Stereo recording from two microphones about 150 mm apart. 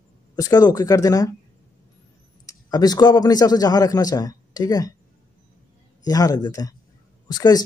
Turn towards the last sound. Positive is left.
turn(degrees=25)  # may be behind; listen again after turning